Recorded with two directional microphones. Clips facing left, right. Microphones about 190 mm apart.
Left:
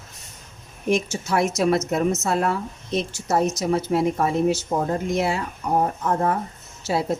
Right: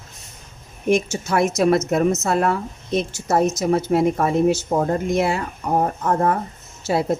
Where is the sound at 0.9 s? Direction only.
50° right (ahead or behind).